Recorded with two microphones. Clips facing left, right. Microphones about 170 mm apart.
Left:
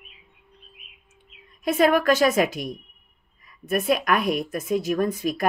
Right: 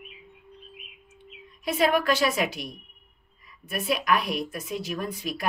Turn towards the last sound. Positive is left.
turn(degrees=45)  # may be behind; listen again after turning